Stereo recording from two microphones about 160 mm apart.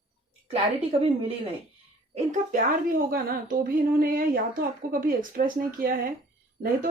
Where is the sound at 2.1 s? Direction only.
50° right (ahead or behind).